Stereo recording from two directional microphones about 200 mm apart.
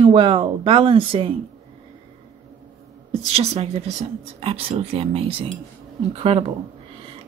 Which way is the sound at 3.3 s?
30° right (ahead or behind).